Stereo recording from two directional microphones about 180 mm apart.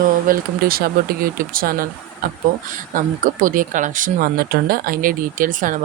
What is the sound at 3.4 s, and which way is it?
Speech, 50° right (ahead or behind).